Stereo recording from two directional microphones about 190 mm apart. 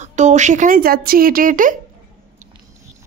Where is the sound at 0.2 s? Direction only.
40° right (ahead or behind).